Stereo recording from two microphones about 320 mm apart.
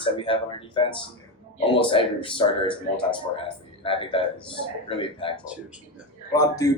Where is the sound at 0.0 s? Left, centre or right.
Centre.